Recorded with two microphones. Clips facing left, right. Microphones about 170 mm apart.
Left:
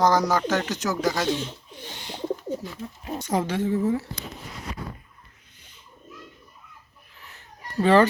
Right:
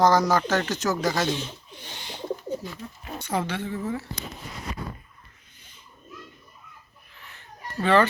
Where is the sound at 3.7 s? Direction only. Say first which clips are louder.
Left 8 dB; 25° left (ahead or behind).